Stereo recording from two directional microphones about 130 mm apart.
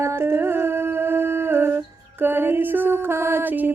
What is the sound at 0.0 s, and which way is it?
Humming, 20° right (ahead or behind).